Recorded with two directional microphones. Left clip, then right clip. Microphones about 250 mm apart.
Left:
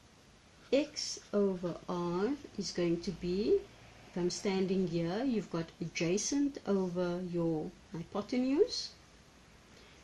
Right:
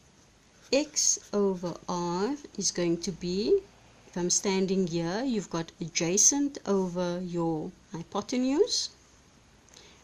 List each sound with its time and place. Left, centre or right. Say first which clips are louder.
0.7 s a woman's voice: right 6 dB; right